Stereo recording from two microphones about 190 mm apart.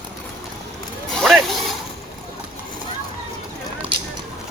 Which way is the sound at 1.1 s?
Centre (ahead or behind).